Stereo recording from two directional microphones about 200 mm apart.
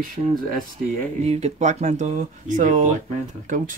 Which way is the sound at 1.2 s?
35° right (ahead or behind).